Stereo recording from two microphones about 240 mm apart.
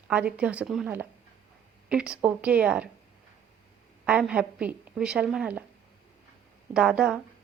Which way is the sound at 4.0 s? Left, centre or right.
Centre.